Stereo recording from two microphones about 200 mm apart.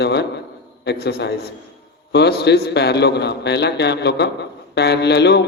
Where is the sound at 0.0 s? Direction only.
55° left (ahead or behind).